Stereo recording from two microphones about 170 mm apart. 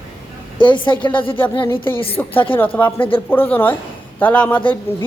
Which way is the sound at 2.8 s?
30° left (ahead or behind).